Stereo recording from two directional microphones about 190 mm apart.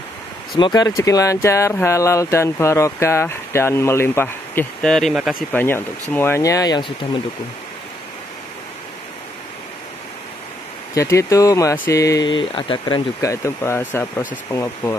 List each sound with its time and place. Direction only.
0.6 s speech: 20° left (ahead or behind); by 5.4 s 5° right (ahead or behind)
5.5 s speech: 10° left (ahead or behind)
11.0 s speech: 15° left (ahead or behind)